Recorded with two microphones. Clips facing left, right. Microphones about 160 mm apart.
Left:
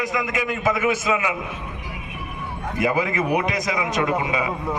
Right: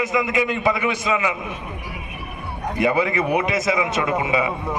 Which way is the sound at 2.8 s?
Centre (ahead or behind).